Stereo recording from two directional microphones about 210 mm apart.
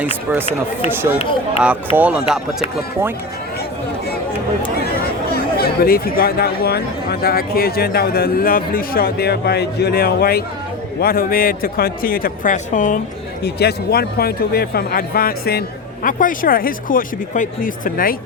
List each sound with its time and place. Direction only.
0.0 s speech: 10° right (ahead or behind)
1.6 s speech: 10° right (ahead or behind)
5.5 s speech: 45° left (ahead or behind)
13.4 s speech: 50° left (ahead or behind)